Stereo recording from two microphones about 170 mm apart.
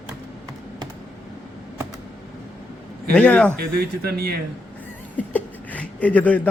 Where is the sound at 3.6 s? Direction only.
65° right (ahead or behind).